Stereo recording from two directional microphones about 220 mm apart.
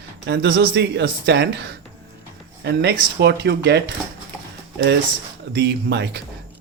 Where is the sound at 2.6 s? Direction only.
50° right (ahead or behind).